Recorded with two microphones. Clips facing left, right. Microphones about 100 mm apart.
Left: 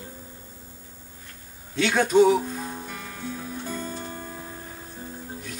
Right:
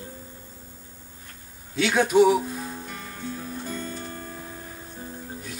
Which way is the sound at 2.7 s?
Centre (ahead or behind).